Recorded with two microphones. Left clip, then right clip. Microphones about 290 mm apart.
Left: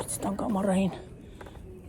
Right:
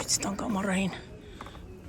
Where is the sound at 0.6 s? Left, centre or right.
Centre.